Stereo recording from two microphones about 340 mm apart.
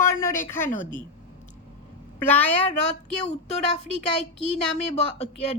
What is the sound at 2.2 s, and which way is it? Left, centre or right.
Speech, centre.